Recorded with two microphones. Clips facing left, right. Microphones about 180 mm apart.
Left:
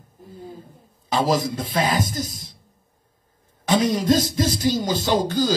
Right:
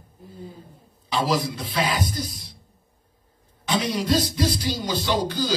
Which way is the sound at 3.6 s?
45° left (ahead or behind).